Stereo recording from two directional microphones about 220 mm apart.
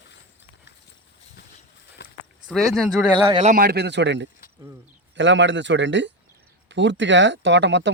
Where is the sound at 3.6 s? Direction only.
45° right (ahead or behind).